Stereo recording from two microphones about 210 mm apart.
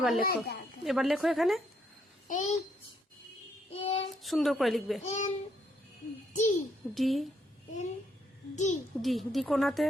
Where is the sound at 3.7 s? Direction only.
30° left (ahead or behind).